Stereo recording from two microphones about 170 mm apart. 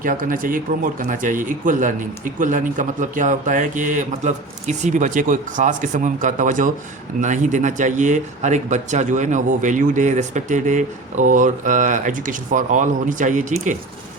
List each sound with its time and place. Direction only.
0.0 s speech: 55° right (ahead or behind)